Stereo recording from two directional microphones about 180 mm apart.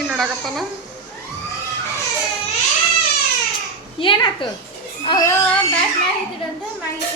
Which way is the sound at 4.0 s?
30° left (ahead or behind).